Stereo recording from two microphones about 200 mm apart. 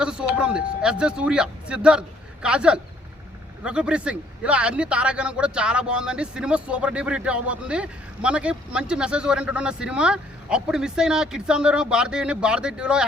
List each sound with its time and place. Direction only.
0.0 s a man's voice: 5° right (ahead or behind)